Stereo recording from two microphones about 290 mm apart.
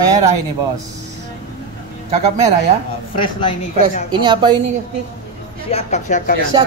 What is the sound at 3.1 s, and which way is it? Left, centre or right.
Speech, centre.